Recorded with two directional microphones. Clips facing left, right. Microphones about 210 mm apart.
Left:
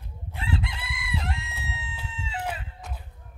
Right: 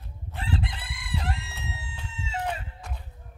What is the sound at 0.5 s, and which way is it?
Chicken, 35° right (ahead or behind).